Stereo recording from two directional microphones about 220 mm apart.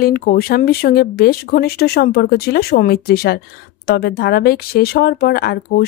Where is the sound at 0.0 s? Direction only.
45° left (ahead or behind).